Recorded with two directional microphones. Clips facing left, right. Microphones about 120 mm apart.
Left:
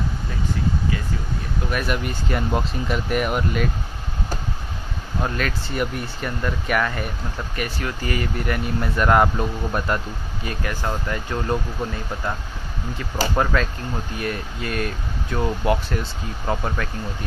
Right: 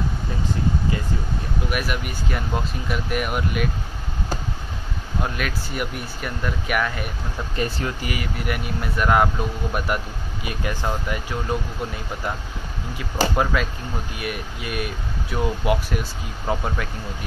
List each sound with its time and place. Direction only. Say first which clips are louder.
1.7 s speech: left 4 dB; 5° right (ahead or behind)
5.2 s speech: left 2 dB; 5° right (ahead or behind)
7.5 s speech: right 3 dB; 25° right (ahead or behind)
8.0 s speech: left 3 dB; 10° right (ahead or behind)